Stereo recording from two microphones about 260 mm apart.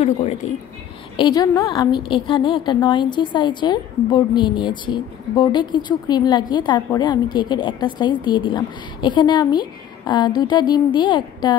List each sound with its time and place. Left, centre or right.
0.0 s a woman's voice: left